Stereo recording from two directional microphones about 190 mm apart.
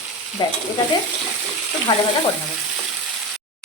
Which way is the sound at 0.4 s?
25° left (ahead or behind).